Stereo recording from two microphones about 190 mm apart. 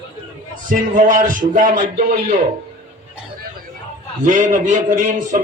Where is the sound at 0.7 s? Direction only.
45° right (ahead or behind).